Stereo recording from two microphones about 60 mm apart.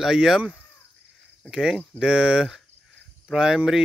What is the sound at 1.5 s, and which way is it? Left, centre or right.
Speech, centre.